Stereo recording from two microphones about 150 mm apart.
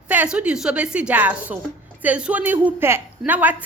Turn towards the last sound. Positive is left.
turn(degrees=-10)  # may be behind; listen again after turning